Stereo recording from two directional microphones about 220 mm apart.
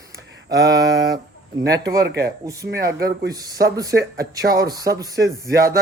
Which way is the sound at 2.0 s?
45° right (ahead or behind).